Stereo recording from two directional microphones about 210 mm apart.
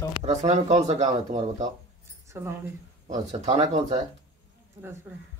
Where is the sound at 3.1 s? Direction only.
35° right (ahead or behind).